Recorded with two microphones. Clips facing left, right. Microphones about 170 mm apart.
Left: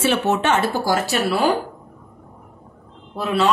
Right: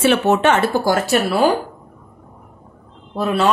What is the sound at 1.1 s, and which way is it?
Speech, centre (ahead or behind).